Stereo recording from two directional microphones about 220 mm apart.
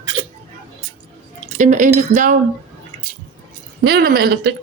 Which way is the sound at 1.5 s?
35° right (ahead or behind).